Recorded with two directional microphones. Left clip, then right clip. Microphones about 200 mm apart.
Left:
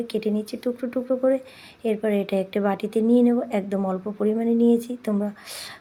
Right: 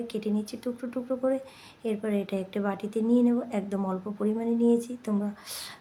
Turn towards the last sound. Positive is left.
turn(degrees=15)  # may be behind; listen again after turning